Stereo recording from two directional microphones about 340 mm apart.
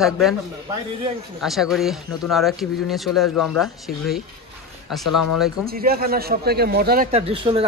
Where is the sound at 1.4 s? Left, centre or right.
Centre.